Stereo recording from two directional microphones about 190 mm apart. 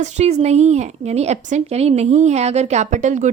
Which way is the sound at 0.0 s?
35° right (ahead or behind).